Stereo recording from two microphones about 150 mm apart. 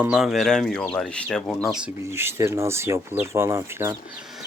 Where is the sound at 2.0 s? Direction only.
15° right (ahead or behind).